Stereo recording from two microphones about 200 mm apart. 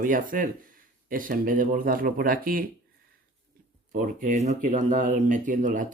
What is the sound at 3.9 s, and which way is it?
Speech, 40° right (ahead or behind).